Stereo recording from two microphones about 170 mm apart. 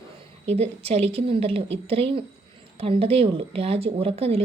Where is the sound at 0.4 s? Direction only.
40° right (ahead or behind).